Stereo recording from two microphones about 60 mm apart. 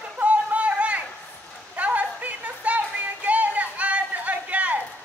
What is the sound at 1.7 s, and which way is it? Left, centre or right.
Music, right.